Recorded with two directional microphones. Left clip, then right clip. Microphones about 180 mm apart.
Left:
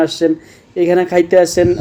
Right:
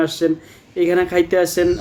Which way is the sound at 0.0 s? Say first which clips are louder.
Left 4 dB; 15° left (ahead or behind).